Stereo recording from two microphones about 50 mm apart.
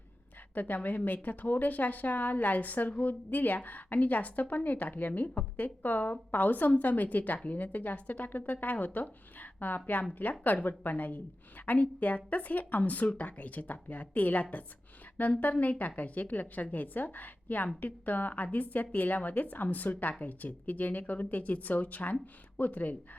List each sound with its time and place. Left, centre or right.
0.5 s a woman's voice: left